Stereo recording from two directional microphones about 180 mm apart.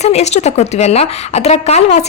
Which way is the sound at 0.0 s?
40° left (ahead or behind).